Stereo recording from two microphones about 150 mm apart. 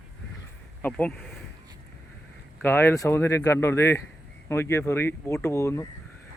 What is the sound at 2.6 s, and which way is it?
Speech, 15° left (ahead or behind).